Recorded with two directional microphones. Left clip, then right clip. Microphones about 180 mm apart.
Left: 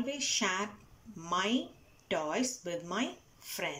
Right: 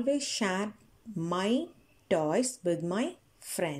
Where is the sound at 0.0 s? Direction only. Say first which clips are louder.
Right 3 dB; 35° right (ahead or behind).